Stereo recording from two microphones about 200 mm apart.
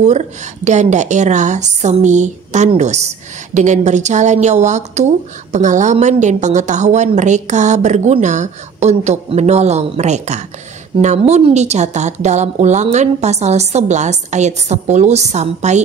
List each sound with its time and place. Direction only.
0.0 s a woman's voice: 35° right (ahead or behind)